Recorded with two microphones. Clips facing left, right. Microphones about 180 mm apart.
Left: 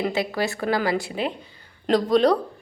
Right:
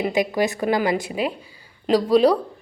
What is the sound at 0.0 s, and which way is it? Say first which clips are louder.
A woman's voice: right 3 dB; 15° right (ahead or behind).